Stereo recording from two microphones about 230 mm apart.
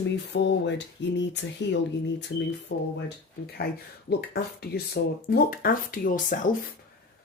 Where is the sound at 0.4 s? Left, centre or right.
Left.